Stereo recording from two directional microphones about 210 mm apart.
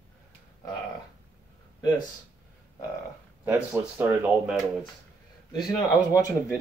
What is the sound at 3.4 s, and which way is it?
Speech, 10° right (ahead or behind).